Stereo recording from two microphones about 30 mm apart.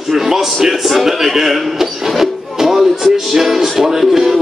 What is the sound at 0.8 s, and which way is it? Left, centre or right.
Speech, centre.